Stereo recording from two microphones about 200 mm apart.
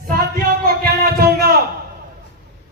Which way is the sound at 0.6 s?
50° right (ahead or behind).